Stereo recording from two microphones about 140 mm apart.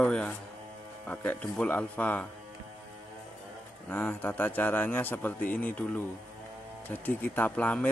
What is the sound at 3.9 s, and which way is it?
Speech, 15° left (ahead or behind).